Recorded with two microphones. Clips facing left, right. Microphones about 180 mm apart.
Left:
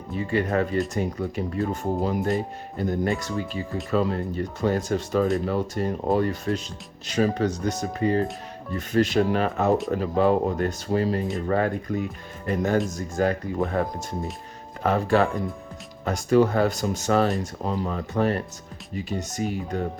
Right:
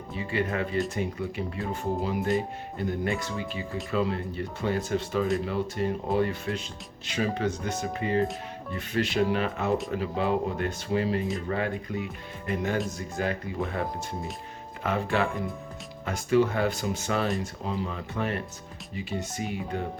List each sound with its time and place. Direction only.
0.3 s speech: 40° left (ahead or behind)
14.8 s speech: 40° left (ahead or behind)